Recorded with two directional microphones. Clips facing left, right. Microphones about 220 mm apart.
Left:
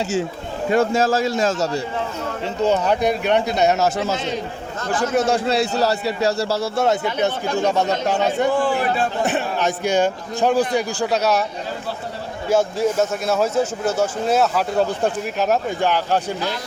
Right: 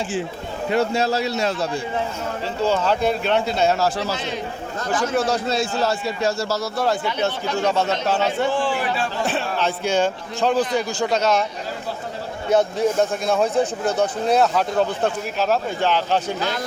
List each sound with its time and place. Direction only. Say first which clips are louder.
0.7 s a man's voice: left 3 dB; 50° left (ahead or behind)
2.6 s a man's voice: left 2 dB; 15° left (ahead or behind)
5.1 s a man's voice: left 4 dB; 25° left (ahead or behind)
5.5 s a man's voice: left 3 dB; 35° left (ahead or behind); by 8.4 s 15° left (ahead or behind)
8.5 s a man's voice: left 3 dB; 55° left (ahead or behind)
9.2 s a man's voice: left 2 dB; 15° left (ahead or behind)
12.5 s speech: even; 5° left (ahead or behind)